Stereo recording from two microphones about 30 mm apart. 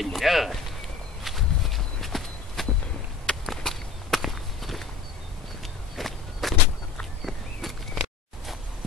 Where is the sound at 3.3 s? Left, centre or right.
Left.